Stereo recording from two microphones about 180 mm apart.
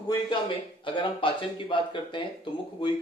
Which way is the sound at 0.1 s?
25° left (ahead or behind).